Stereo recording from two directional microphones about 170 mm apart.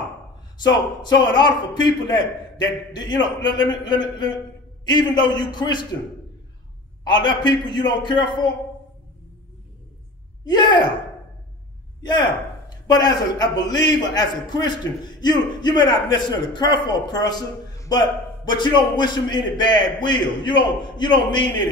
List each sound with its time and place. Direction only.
0.6 s a man's voice: 25° left (ahead or behind)
3.2 s a man's voice: 25° left (ahead or behind)
7.1 s a man's voice: 25° left (ahead or behind)
10.4 s a man's voice: 25° left (ahead or behind)
12.0 s a man's voice: 25° left (ahead or behind)